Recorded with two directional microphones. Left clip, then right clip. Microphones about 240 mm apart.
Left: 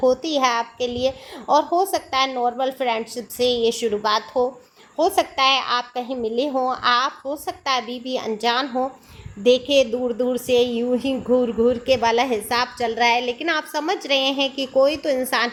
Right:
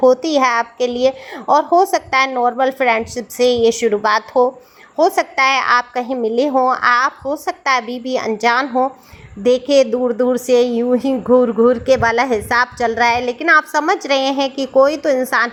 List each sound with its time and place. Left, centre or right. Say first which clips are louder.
0.0 s a woman's voice: right 6 dB; centre